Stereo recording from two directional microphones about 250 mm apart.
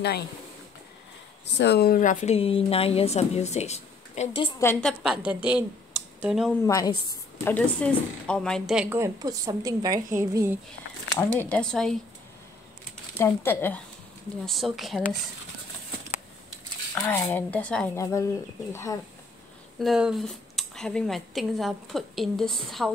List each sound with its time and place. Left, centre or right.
1.4 s a woman's voice: left
4.4 s speech: centre
5.0 s speech: centre
6.6 s a woman's voice: centre
11.1 s speech: centre
13.2 s speech: centre
16.9 s speech: centre
19.8 s speech: centre